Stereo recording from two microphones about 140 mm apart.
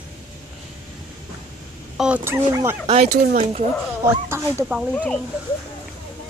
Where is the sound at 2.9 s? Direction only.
55° right (ahead or behind).